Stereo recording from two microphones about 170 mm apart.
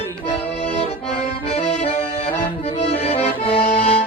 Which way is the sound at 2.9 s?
35° left (ahead or behind).